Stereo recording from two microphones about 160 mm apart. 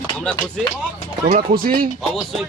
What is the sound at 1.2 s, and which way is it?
Speech, 60° right (ahead or behind).